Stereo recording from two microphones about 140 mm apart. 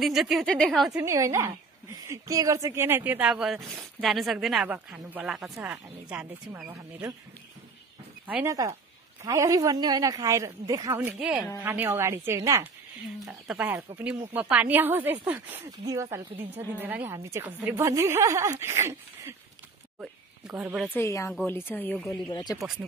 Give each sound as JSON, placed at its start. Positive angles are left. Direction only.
{"t": 0.0, "sound": "a woman's voice", "side_deg": 0}
{"t": 1.0, "sound": "a woman's voice", "side_deg": -20}
{"t": 4.6, "sound": "a woman's voice", "side_deg": -10}
{"t": 8.5, "sound": "a woman's voice", "side_deg": -25}
{"t": 11.0, "sound": "a woman's voice", "side_deg": -10}
{"t": 13.3, "sound": "speech", "side_deg": -10}
{"t": 15.8, "sound": "a woman's voice", "side_deg": -25}
{"t": 20.0, "sound": "speech", "side_deg": -5}
{"t": 20.9, "sound": "speech", "side_deg": 20}
{"t": 22.3, "sound": "speech", "side_deg": 30}